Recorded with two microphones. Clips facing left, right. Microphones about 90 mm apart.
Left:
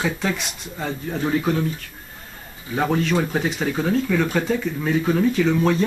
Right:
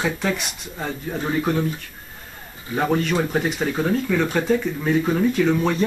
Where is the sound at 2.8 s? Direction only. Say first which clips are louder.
Even; 5° right (ahead or behind).